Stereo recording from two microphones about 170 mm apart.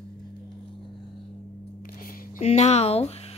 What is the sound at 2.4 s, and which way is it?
Speech, 40° left (ahead or behind).